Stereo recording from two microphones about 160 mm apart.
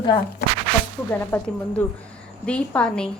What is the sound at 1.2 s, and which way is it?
A woman's voice, 10° left (ahead or behind).